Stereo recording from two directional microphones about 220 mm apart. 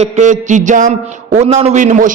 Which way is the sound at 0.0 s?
35° right (ahead or behind).